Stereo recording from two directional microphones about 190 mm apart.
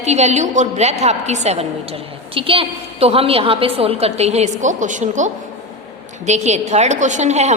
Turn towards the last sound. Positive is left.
turn(degrees=-35)  # may be behind; listen again after turning